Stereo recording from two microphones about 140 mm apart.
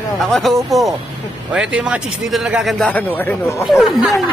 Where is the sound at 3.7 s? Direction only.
Centre (ahead or behind).